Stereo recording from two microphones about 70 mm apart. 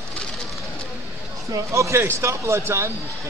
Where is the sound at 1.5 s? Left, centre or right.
Right.